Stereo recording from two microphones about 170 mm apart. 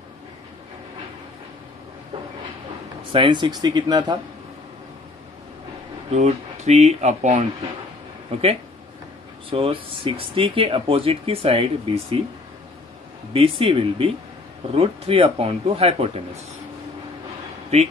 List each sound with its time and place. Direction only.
3.1 s speech: 30° right (ahead or behind)
6.1 s speech: 40° right (ahead or behind)
9.5 s speech: 30° right (ahead or behind)
13.3 s speech: 30° right (ahead or behind)